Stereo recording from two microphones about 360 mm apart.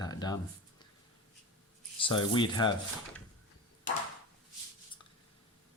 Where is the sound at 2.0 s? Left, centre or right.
Centre.